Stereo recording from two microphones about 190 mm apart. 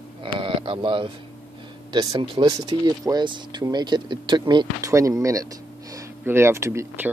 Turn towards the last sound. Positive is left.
turn(degrees=-15)  # may be behind; listen again after turning